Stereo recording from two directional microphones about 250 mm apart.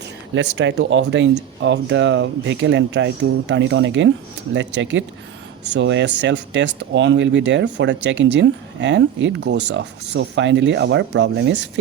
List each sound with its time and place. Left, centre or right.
0.3 s speech: right